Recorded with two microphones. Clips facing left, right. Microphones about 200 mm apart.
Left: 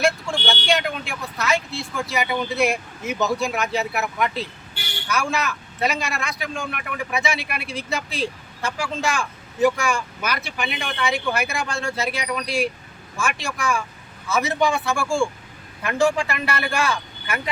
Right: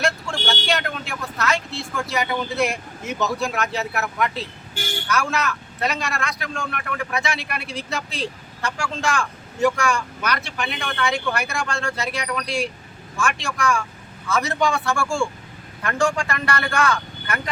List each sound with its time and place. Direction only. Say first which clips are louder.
0.0 s vehicle: left 3 dB; centre (ahead or behind)
2.0 s speech: left 1 dB; 5° left (ahead or behind)
4.7 s speech: right 7 dB; 45° right (ahead or behind)
5.0 s speech: even; centre (ahead or behind)
16.6 s speech: right 3 dB; 30° left (ahead or behind)